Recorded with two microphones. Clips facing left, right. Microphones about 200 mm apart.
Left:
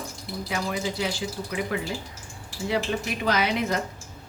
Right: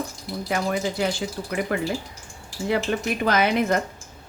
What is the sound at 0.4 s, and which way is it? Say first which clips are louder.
Speech: right 4 dB; 50° right (ahead or behind).